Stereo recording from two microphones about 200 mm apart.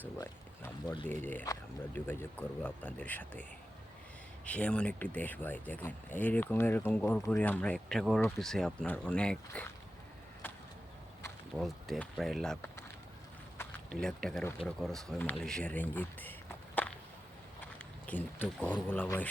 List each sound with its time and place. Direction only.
0.2 s speech: 10° left (ahead or behind)
4.4 s speech: 5° left (ahead or behind)
11.5 s speech: centre (ahead or behind)
16.8 s a sound: 10° left (ahead or behind)
18.0 s speech: 10° left (ahead or behind)